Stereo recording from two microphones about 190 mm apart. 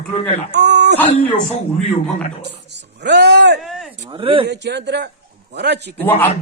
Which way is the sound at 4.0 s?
25° right (ahead or behind).